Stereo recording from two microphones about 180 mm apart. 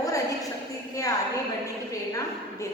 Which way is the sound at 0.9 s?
20° left (ahead or behind).